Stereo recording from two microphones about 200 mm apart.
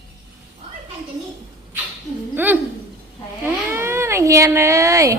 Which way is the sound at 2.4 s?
10° right (ahead or behind).